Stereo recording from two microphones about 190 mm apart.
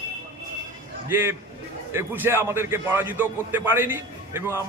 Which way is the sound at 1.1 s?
10° right (ahead or behind).